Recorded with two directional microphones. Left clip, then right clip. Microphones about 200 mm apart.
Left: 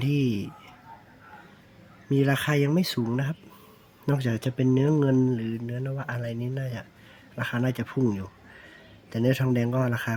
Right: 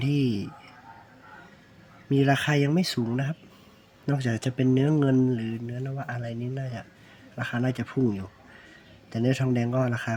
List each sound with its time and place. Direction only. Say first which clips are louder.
0.0 s speech: even; 5° left (ahead or behind)
2.0 s speech: right 1 dB; centre (ahead or behind)